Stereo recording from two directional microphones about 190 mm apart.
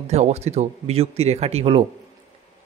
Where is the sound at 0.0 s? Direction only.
35° right (ahead or behind).